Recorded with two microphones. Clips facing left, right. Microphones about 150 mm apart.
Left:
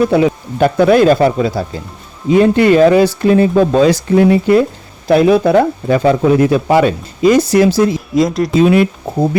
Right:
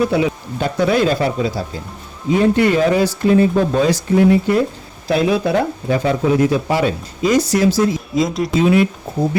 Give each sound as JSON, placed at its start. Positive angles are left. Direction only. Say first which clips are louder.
{"t": 0.1, "sound": "speech", "louder": "left 5 dB", "side_deg": 55}
{"t": 2.3, "sound": "speech", "louder": "left 5 dB", "side_deg": 75}
{"t": 5.0, "sound": "speech", "louder": "left 7 dB", "side_deg": 55}
{"t": 8.1, "sound": "speech", "louder": "left 5 dB", "side_deg": 0}
{"t": 8.6, "sound": "speech", "louder": "left 3 dB", "side_deg": 70}